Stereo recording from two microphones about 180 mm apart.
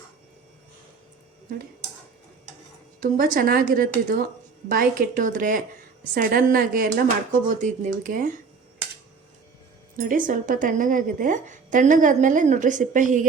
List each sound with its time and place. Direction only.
3.0 s a woman's voice: 50° right (ahead or behind)
10.0 s a woman's voice: 45° right (ahead or behind)